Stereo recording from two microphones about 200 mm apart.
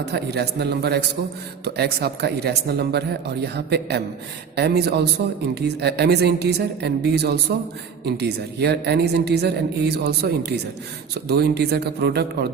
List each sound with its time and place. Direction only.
0.0 s a woman's voice: 55° right (ahead or behind)